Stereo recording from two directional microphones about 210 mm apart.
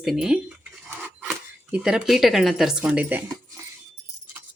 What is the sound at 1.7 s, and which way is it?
Speech, 5° right (ahead or behind).